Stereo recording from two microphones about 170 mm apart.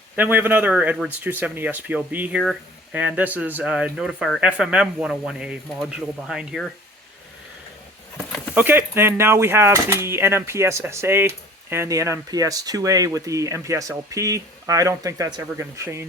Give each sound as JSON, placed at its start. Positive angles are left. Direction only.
{"t": 0.2, "sound": "speech", "side_deg": -10}
{"t": 8.5, "sound": "speech", "side_deg": -15}